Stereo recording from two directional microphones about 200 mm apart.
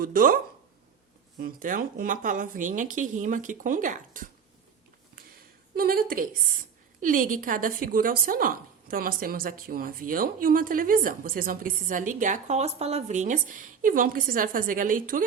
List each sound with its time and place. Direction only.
0.0 s speech: 45° right (ahead or behind)
1.4 s speech: 45° right (ahead or behind)
5.7 s speech: 45° right (ahead or behind)